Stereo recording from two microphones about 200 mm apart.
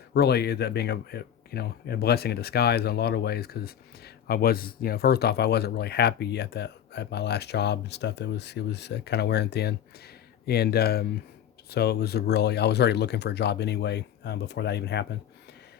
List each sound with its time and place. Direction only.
0.1 s speech: 55° left (ahead or behind)